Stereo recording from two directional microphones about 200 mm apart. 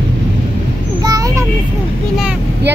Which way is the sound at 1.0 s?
20° right (ahead or behind).